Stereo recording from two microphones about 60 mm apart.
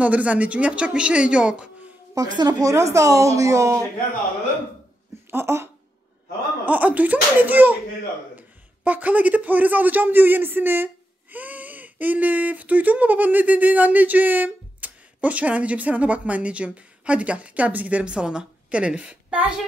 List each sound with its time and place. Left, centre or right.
0.0 s speech: right
2.1 s speech: right
5.3 s speech: right
6.6 s a man's voice: right